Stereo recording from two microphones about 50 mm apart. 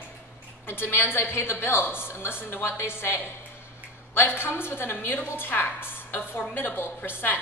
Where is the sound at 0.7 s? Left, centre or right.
Left.